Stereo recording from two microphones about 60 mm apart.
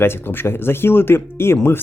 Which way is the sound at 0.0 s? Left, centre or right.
Left.